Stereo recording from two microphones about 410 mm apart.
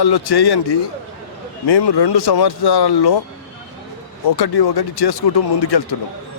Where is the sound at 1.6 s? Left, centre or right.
Left.